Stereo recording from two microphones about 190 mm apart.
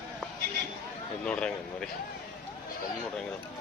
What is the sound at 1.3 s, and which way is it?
Speech, 5° left (ahead or behind).